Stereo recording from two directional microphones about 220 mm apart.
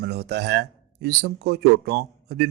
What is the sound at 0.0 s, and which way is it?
A man's voice, 50° right (ahead or behind).